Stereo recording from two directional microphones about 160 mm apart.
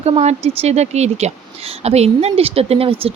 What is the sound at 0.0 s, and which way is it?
Speech, 40° right (ahead or behind).